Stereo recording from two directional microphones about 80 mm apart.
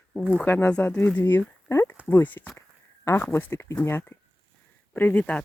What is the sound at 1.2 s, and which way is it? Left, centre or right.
Speech, left.